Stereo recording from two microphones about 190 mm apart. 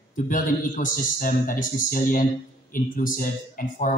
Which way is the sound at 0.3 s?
45° left (ahead or behind).